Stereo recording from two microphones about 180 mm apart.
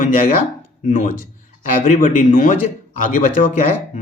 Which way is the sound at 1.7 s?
45° left (ahead or behind).